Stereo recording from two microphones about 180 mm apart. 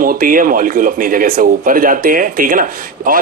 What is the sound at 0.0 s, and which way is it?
A man's voice, 50° right (ahead or behind).